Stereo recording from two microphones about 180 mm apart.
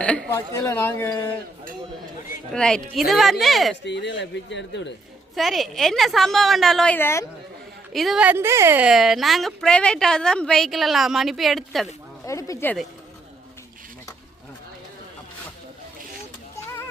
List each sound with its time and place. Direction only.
0.0 s a sound: 5° left (ahead or behind)
0.3 s speech: 15° left (ahead or behind)
2.5 s a woman's voice: 5° left (ahead or behind)
3.8 s speech: 75° left (ahead or behind)
5.3 s a woman's voice: centre (ahead or behind)
7.9 s a woman's voice: centre (ahead or behind)
12.2 s speech: 15° left (ahead or behind)